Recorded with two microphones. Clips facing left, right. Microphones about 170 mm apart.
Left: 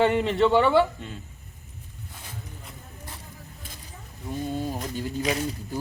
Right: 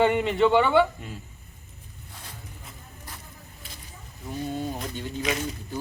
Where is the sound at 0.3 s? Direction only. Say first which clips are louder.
Even; centre (ahead or behind).